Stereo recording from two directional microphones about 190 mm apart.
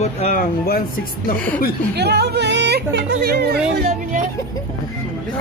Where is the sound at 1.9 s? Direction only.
60° right (ahead or behind).